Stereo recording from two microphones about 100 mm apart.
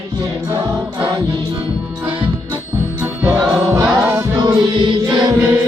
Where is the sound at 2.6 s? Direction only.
20° right (ahead or behind).